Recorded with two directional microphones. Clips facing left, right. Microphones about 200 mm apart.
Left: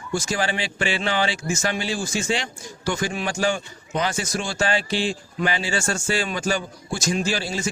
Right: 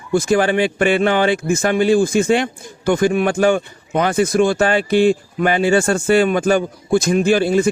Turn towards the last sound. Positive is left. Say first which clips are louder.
# right 11 dB
turn(degrees=-55)  # may be behind; listen again after turning